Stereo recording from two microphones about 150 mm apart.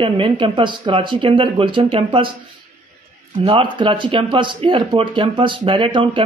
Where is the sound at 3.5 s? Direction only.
35° right (ahead or behind).